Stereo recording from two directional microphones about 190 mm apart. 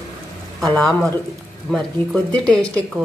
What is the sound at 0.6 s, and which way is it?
Speech, centre (ahead or behind).